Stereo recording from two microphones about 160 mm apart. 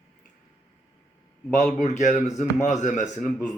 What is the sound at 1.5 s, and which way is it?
Speech, 50° left (ahead or behind).